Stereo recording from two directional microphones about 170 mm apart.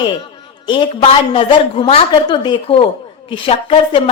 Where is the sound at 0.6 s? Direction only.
30° left (ahead or behind).